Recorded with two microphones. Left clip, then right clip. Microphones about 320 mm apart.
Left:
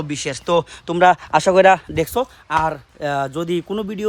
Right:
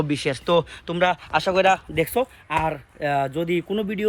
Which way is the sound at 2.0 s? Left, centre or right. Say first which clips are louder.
Left 2 dB; centre.